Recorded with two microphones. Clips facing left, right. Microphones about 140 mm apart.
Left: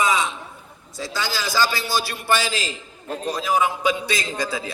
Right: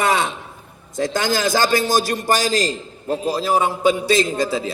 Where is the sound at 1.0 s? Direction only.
50° right (ahead or behind).